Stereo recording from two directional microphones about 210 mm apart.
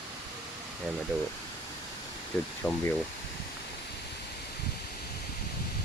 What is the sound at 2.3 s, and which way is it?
Speech, 5° left (ahead or behind).